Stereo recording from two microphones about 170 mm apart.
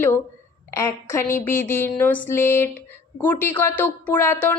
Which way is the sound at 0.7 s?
15° left (ahead or behind).